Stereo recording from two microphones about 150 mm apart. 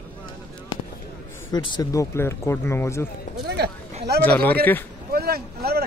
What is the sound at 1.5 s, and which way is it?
Speech, 25° left (ahead or behind).